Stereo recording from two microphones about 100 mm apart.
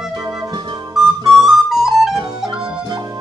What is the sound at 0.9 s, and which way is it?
Music, 5° right (ahead or behind).